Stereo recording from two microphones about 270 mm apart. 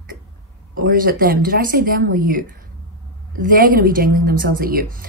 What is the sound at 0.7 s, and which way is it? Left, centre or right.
A woman's voice, right.